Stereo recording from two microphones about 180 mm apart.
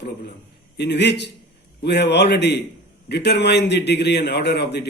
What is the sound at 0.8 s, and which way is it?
A man's voice, 70° left (ahead or behind).